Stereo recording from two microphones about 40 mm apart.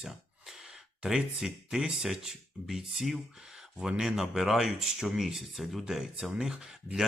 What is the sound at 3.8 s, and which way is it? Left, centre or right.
Speech, centre.